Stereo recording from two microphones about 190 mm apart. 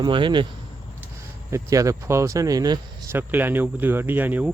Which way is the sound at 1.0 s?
15° right (ahead or behind).